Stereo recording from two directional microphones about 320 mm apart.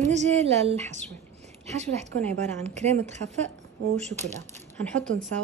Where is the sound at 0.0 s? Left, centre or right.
Right.